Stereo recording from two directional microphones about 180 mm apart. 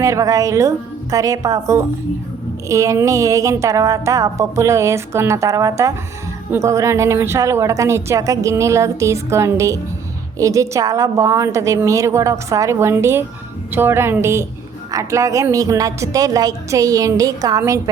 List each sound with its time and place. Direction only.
0.0 s a woman's voice: 15° right (ahead or behind)